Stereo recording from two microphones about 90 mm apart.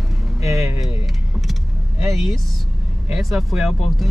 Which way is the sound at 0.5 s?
Centre (ahead or behind).